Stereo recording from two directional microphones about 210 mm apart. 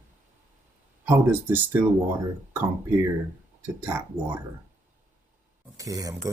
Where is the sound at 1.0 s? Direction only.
10° right (ahead or behind).